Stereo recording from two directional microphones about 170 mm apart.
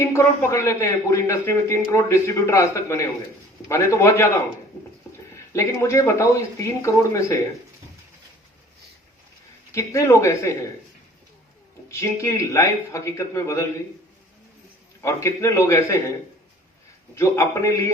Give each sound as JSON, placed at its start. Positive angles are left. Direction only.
{"t": 0.0, "sound": "speech", "side_deg": 15}
{"t": 5.3, "sound": "speech", "side_deg": 15}
{"t": 9.7, "sound": "speech", "side_deg": 15}
{"t": 11.9, "sound": "speech", "side_deg": 15}
{"t": 15.0, "sound": "speech", "side_deg": 15}
{"t": 17.2, "sound": "speech", "side_deg": 15}